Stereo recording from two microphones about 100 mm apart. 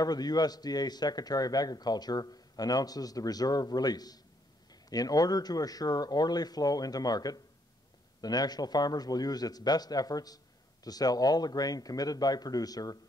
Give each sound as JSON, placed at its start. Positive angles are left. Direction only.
{"t": 0.0, "sound": "a man's voice", "side_deg": 40}